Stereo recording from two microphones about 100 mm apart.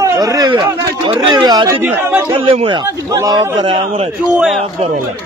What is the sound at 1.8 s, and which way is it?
Speech, 20° right (ahead or behind).